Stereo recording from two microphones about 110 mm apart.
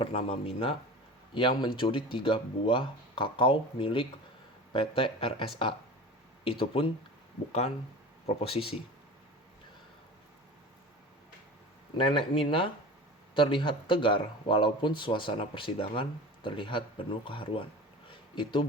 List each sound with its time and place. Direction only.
0.0 s speech: 60° left (ahead or behind)
8.3 s speech: 65° left (ahead or behind)
11.9 s speech: 50° left (ahead or behind)
18.1 s a sound: 50° left (ahead or behind)